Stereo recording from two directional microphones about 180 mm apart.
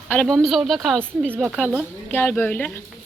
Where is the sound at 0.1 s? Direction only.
5° left (ahead or behind).